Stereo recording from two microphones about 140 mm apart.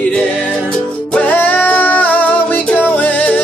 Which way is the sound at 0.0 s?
10° left (ahead or behind).